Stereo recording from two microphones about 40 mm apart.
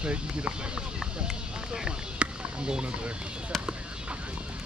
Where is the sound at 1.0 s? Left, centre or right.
Centre.